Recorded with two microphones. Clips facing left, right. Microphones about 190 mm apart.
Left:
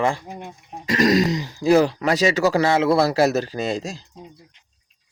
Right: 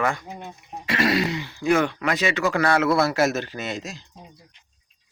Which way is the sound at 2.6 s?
25° left (ahead or behind).